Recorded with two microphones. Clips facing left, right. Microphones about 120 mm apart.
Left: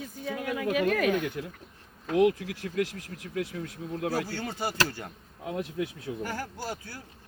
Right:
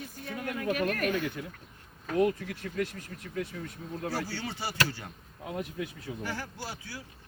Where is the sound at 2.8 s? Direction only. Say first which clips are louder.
Left 4 dB; 90° left.